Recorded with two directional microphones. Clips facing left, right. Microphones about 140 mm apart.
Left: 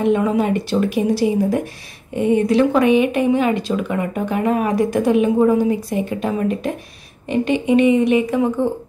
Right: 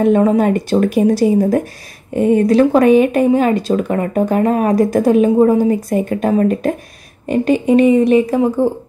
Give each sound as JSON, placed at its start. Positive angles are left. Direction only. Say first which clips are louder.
{"t": 0.0, "sound": "speech", "louder": "right 5 dB", "side_deg": -40}